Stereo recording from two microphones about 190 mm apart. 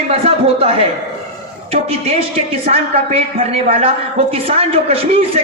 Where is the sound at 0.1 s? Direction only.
30° right (ahead or behind).